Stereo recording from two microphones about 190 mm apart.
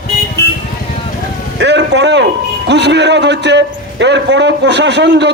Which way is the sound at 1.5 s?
65° right (ahead or behind).